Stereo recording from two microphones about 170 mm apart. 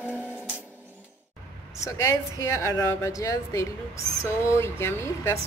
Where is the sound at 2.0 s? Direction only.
20° left (ahead or behind).